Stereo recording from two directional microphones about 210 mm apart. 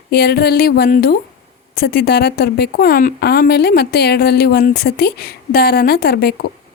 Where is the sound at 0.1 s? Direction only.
50° left (ahead or behind).